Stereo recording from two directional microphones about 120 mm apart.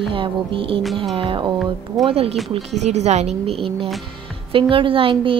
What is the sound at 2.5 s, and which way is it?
Speech, 65° right (ahead or behind).